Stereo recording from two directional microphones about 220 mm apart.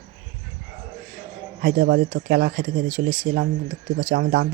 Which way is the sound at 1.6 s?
40° right (ahead or behind).